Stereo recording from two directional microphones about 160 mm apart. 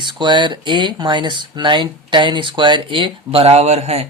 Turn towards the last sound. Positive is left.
turn(degrees=-40)  # may be behind; listen again after turning